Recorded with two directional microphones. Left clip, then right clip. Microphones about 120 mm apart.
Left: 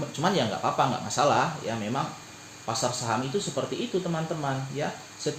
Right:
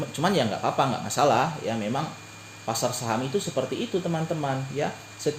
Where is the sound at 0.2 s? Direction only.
90° right.